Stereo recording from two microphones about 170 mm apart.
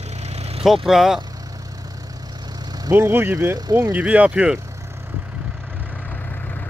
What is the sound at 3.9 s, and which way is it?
Speech, 10° right (ahead or behind).